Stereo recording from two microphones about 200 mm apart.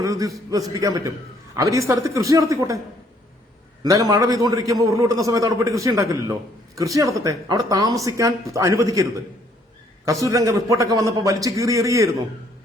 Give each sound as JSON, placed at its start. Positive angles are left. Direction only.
{"t": 0.0, "sound": "a man's voice", "side_deg": -15}
{"t": 3.8, "sound": "a man's voice", "side_deg": -20}
{"t": 10.2, "sound": "a man's voice", "side_deg": -15}